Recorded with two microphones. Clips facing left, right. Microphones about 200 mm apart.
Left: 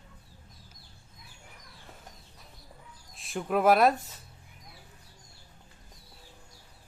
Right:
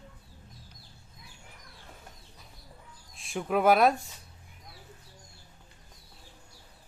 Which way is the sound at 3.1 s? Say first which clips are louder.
Even; centre (ahead or behind).